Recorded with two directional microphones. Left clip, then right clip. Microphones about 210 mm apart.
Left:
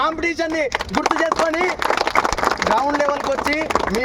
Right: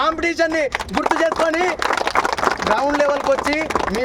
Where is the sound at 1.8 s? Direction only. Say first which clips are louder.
Even; 40° left (ahead or behind).